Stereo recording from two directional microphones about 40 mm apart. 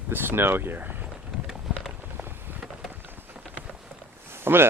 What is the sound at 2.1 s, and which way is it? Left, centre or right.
Vehicle, right.